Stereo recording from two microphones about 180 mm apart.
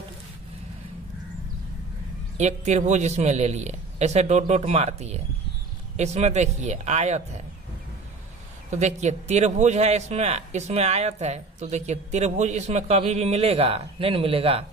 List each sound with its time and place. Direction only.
2.3 s a man's voice: 40° right (ahead or behind)
8.6 s a man's voice: 40° right (ahead or behind)